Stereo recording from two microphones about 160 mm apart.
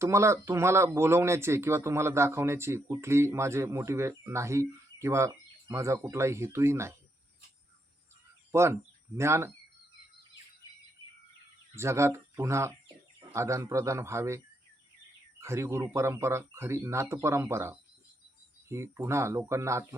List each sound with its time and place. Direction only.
0.0 s speech: 20° right (ahead or behind)
8.5 s speech: 15° right (ahead or behind)
11.7 s speech: 15° right (ahead or behind)